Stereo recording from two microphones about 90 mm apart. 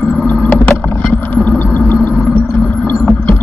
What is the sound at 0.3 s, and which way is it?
Vehicle, 20° left (ahead or behind).